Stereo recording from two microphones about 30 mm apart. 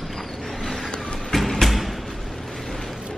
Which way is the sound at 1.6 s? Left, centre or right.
Centre.